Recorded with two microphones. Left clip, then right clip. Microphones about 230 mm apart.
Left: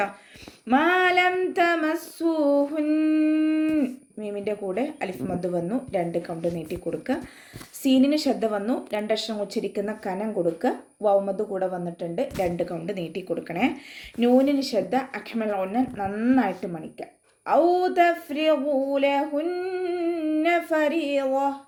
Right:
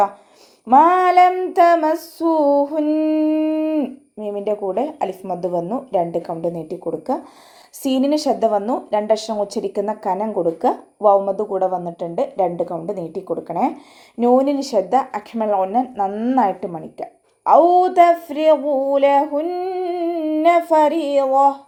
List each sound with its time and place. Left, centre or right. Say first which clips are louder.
0.7 s a woman's voice: right 8 dB; centre
3.3 s a sound: right 4 dB; centre
4.4 s a woman's voice: right 7 dB; centre